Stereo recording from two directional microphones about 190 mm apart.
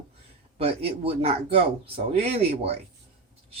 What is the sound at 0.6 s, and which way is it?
Speech, 30° right (ahead or behind).